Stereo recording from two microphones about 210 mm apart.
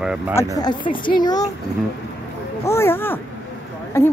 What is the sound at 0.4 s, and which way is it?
A woman's voice, 20° left (ahead or behind).